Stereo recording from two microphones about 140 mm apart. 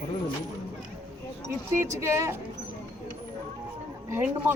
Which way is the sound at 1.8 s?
20° right (ahead or behind).